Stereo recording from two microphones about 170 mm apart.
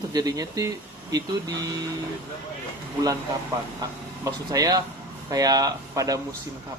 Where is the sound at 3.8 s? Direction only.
20° right (ahead or behind).